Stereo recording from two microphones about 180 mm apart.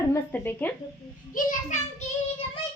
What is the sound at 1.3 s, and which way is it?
Speech, 45° left (ahead or behind).